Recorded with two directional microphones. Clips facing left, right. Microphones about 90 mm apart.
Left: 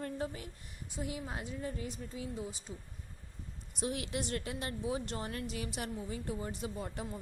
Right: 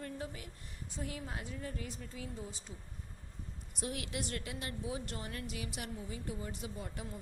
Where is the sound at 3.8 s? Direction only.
25° left (ahead or behind).